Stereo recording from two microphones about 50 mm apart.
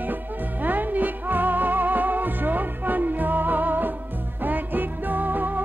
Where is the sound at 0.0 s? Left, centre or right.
Right.